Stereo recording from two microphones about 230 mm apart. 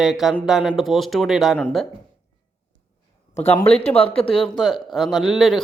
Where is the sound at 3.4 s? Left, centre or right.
Left.